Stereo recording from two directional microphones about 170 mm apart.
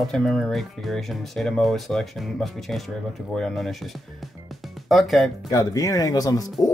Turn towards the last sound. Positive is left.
turn(degrees=20)  # may be behind; listen again after turning